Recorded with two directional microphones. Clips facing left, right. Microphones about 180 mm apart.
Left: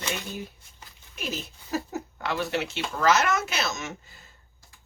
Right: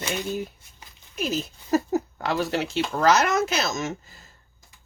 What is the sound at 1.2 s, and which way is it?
Speech, 40° right (ahead or behind).